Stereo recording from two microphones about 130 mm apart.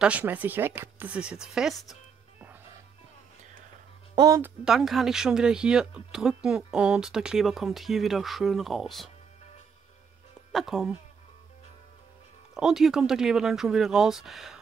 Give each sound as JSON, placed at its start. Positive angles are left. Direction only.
{"t": 0.0, "sound": "speech", "side_deg": -10}
{"t": 4.1, "sound": "music", "side_deg": -30}
{"t": 4.6, "sound": "speech", "side_deg": 0}
{"t": 10.5, "sound": "speech", "side_deg": 0}
{"t": 12.5, "sound": "speech", "side_deg": -5}